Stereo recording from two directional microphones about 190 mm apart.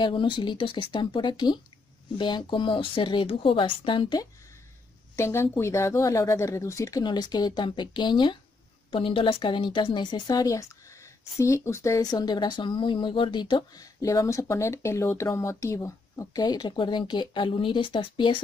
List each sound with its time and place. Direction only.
0.0 s a woman's voice: 25° left (ahead or behind)